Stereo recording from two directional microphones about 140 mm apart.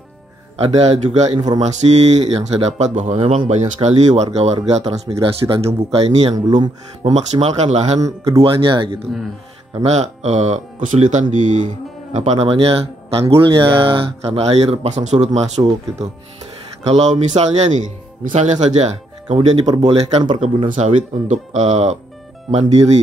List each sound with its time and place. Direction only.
0.7 s speech: 50° right (ahead or behind)
6.2 s speech: 30° right (ahead or behind)
7.0 s speech: 45° right (ahead or behind)
9.8 s speech: 50° right (ahead or behind)
16.8 s speech: 50° right (ahead or behind)
20.2 s speech: 60° right (ahead or behind)